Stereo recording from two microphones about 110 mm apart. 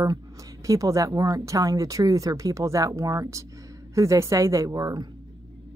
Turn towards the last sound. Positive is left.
turn(degrees=-35)  # may be behind; listen again after turning